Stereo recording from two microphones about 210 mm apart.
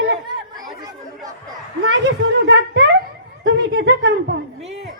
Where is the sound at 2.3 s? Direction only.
55° right (ahead or behind).